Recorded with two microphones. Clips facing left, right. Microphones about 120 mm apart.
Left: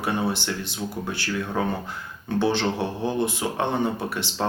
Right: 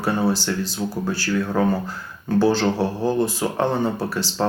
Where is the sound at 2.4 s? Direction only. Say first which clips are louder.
Right 4 dB; 35° right (ahead or behind).